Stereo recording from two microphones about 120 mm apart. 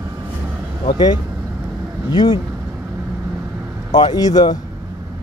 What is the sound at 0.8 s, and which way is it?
Speech, 35° left (ahead or behind).